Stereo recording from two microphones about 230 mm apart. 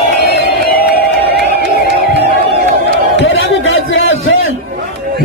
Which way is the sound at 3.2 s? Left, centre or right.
Left.